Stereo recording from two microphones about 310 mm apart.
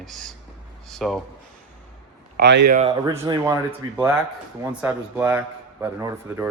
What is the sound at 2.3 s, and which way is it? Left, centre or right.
Speech, right.